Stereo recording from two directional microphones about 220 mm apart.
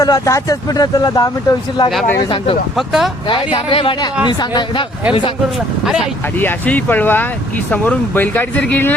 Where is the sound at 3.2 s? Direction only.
20° left (ahead or behind).